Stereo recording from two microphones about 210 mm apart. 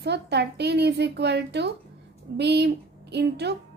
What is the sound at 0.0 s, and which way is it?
A woman's voice, 50° right (ahead or behind).